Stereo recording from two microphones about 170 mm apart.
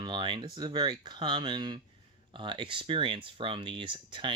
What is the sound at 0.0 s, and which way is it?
Speech, 25° right (ahead or behind).